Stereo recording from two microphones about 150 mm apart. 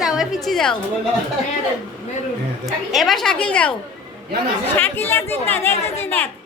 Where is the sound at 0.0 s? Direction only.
5° right (ahead or behind).